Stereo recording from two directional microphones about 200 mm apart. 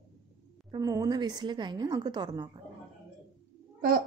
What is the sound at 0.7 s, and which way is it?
A woman's voice, 20° right (ahead or behind).